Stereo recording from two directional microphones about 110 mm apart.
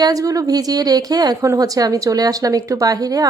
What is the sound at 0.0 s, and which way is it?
A woman's voice, 30° right (ahead or behind).